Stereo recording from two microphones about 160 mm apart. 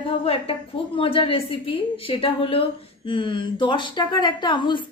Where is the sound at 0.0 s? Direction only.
35° left (ahead or behind).